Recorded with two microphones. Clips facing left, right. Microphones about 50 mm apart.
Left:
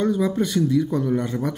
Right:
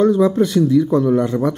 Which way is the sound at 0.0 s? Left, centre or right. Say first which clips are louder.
Right 7 dB; centre.